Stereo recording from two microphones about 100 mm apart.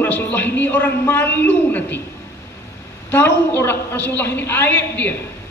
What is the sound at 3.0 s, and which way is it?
A woman's voice, 20° left (ahead or behind).